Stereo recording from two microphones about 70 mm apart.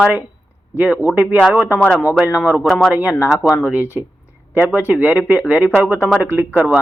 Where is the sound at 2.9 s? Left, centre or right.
Right.